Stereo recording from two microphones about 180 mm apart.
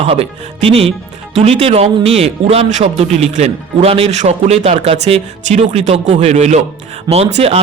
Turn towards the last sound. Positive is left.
turn(degrees=-35)  # may be behind; listen again after turning